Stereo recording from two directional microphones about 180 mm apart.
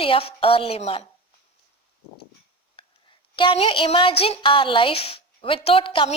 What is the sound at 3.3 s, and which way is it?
A woman's voice, 30° left (ahead or behind).